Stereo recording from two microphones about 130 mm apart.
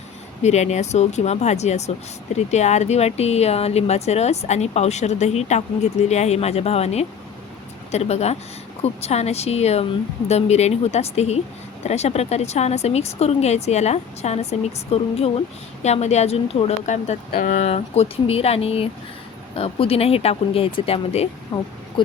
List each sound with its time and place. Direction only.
0.4 s speech: 60° left (ahead or behind); by 17.7 s 75° left (ahead or behind)
17.7 s speech: 55° left (ahead or behind)
21.5 s speech: 40° left (ahead or behind)